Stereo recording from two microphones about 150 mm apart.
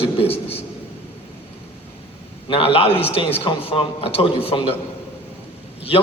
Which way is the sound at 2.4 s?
35° left (ahead or behind).